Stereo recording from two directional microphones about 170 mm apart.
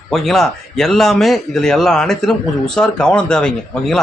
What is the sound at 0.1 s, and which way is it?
A man's voice, centre (ahead or behind).